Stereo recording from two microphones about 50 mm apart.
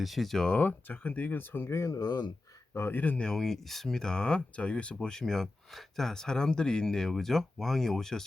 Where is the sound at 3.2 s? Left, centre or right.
Centre.